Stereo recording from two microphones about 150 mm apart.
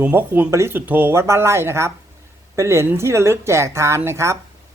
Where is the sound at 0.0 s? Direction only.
15° right (ahead or behind).